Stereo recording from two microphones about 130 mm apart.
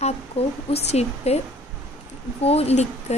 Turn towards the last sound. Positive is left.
turn(degrees=55)  # may be behind; listen again after turning